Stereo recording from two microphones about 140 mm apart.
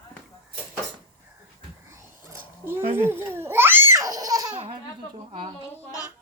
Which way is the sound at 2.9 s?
15° right (ahead or behind).